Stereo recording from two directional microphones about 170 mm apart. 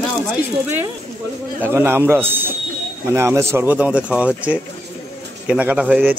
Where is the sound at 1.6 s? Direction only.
15° right (ahead or behind).